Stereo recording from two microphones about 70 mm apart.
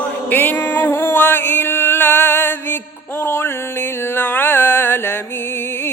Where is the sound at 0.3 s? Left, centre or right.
Left.